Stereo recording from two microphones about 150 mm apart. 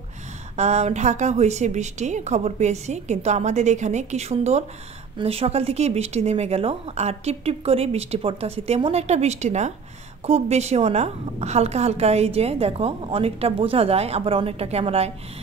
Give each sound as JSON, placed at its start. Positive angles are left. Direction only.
{"t": 0.6, "sound": "a woman's voice", "side_deg": -50}